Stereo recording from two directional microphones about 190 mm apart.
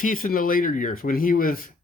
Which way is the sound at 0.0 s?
45° left (ahead or behind).